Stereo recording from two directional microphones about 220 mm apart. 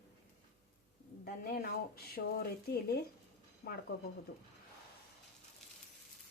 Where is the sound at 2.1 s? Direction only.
45° left (ahead or behind).